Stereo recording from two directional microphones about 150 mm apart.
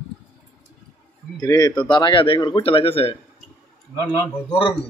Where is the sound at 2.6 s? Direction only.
40° left (ahead or behind).